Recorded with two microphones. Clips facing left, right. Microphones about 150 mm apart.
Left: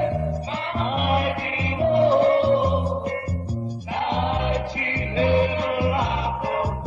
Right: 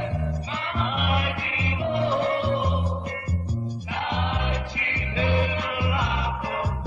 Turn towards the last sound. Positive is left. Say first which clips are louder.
# left 5 dB
turn(degrees=35)  # may be behind; listen again after turning